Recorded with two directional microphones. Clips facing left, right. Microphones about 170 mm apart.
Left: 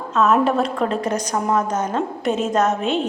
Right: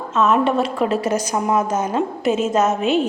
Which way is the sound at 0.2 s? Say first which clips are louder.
Even; centre (ahead or behind).